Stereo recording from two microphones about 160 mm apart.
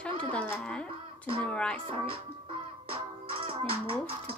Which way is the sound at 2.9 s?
35° right (ahead or behind).